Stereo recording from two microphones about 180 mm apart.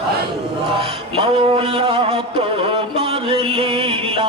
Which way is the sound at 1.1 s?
30° right (ahead or behind).